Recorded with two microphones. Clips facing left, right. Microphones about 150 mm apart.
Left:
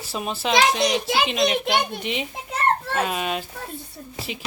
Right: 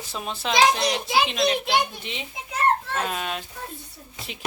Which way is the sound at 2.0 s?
15° left (ahead or behind).